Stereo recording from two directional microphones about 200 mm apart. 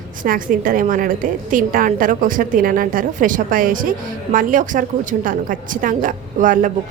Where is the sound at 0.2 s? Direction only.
40° right (ahead or behind).